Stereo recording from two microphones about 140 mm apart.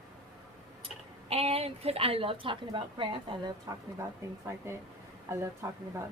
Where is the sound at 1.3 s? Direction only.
45° right (ahead or behind).